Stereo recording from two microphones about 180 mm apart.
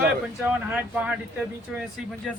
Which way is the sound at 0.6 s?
10° right (ahead or behind).